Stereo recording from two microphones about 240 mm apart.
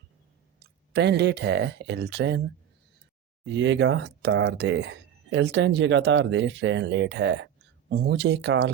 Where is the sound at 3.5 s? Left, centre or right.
Right.